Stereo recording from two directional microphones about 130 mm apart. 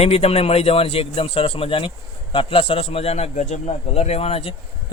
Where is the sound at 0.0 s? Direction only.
50° left (ahead or behind).